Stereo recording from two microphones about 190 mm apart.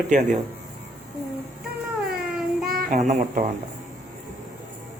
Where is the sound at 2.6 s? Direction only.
55° right (ahead or behind).